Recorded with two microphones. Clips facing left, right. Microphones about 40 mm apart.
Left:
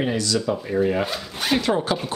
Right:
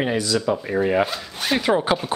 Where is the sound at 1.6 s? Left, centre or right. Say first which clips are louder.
Right 4 dB; centre.